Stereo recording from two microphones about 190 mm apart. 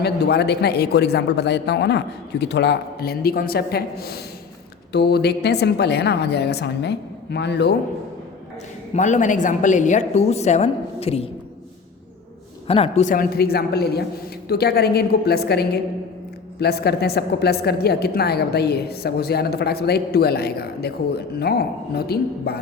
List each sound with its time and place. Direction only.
0.0 s a woman's voice: 60° left (ahead or behind)
8.9 s a woman's voice: 40° left (ahead or behind)
12.6 s a woman's voice: 30° left (ahead or behind); by 22.5 s 55° left (ahead or behind)